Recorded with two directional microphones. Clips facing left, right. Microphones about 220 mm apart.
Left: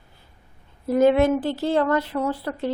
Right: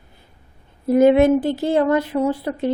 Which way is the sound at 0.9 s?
15° right (ahead or behind).